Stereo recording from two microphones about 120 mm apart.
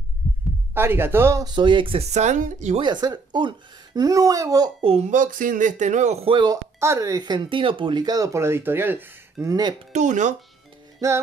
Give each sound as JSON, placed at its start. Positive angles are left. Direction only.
{"t": 0.2, "sound": "heart sounds", "side_deg": -20}
{"t": 0.7, "sound": "speech", "side_deg": -20}
{"t": 1.4, "sound": "speech", "side_deg": -40}
{"t": 2.1, "sound": "speech", "side_deg": -85}
{"t": 2.8, "sound": "speech", "side_deg": -35}
{"t": 4.8, "sound": "speech", "side_deg": -65}
{"t": 6.2, "sound": "speech", "side_deg": -40}
{"t": 6.8, "sound": "speech", "side_deg": -25}
{"t": 9.5, "sound": "speech", "side_deg": -35}
{"t": 9.9, "sound": "speech", "side_deg": -90}
{"t": 11.0, "sound": "speech", "side_deg": -30}